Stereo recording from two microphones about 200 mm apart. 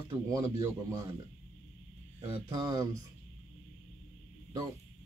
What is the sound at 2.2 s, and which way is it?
Speech, 20° right (ahead or behind).